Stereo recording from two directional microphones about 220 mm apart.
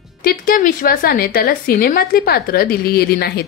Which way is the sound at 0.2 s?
40° left (ahead or behind).